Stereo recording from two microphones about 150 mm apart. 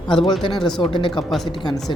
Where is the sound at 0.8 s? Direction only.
35° left (ahead or behind).